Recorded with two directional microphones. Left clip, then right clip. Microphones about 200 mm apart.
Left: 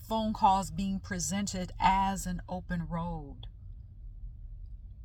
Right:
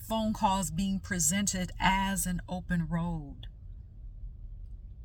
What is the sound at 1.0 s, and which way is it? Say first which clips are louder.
Speech: right 6 dB; 25° right (ahead or behind).